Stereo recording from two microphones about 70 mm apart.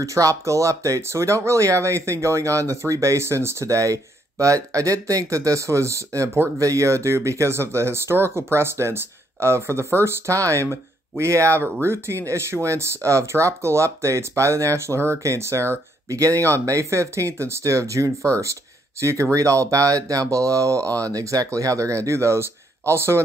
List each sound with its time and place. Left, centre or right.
0.0 s speech: right